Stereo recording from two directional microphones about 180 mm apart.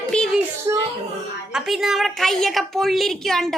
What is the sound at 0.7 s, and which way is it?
Speech, 20° right (ahead or behind).